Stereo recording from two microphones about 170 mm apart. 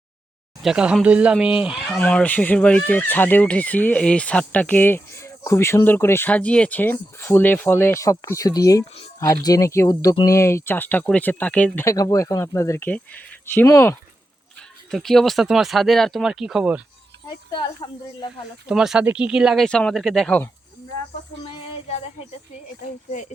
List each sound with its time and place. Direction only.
0.6 s speech: 5° right (ahead or behind)
2.0 s a woman's voice: 10° left (ahead or behind)
14.8 s speech: centre (ahead or behind)
17.2 s a woman's voice: 25° left (ahead or behind)
18.7 s speech: 5° right (ahead or behind)